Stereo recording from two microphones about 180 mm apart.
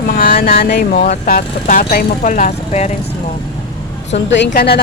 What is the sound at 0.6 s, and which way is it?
Speech, 70° left (ahead or behind).